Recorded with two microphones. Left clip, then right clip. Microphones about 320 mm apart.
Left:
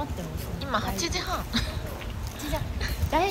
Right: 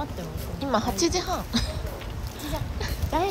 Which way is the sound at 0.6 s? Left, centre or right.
Centre.